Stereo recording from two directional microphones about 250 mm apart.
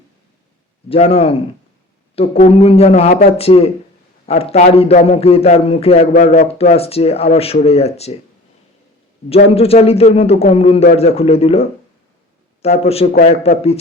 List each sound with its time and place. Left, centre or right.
0.9 s a man's voice: left
9.3 s a man's voice: left
12.6 s a man's voice: left